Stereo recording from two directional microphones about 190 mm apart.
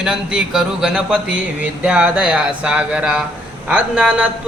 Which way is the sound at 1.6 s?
5° right (ahead or behind).